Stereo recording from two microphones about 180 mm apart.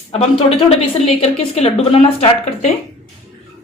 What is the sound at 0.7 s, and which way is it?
A woman's voice, 35° left (ahead or behind).